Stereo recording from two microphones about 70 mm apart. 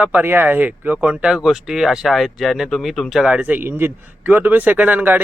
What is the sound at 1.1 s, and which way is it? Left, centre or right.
Speech, centre.